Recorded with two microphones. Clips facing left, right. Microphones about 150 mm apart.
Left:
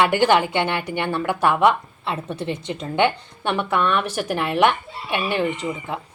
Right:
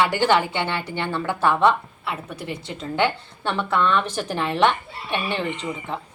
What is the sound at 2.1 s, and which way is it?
A woman's voice, 25° left (ahead or behind).